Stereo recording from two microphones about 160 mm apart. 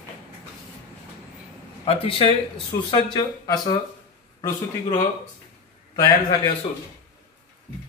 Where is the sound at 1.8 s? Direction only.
35° left (ahead or behind).